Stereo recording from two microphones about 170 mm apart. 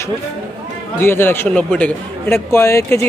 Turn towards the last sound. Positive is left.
turn(degrees=15)  # may be behind; listen again after turning